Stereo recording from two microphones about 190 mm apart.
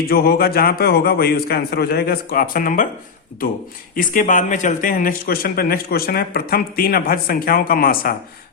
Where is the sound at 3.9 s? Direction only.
45° left (ahead or behind).